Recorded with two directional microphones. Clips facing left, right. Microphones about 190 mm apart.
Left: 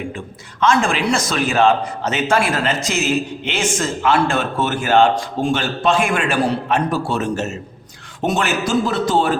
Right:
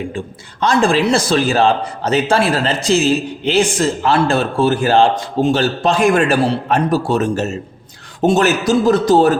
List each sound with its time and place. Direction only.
0.6 s a man's voice: 35° right (ahead or behind)